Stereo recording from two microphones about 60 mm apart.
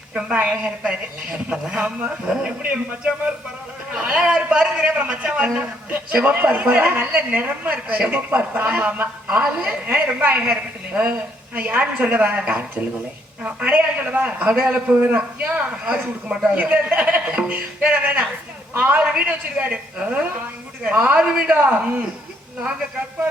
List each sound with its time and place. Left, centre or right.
0.1 s a woman's voice: centre
0.6 s a man's voice: centre